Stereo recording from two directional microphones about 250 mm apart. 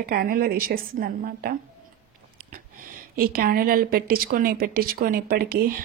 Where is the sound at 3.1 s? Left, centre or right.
Right.